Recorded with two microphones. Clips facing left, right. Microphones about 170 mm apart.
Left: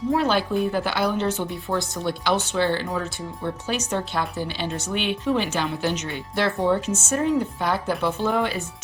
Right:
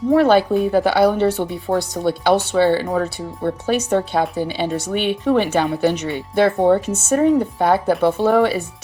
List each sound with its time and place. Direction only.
0.1 s speech: 60° right (ahead or behind)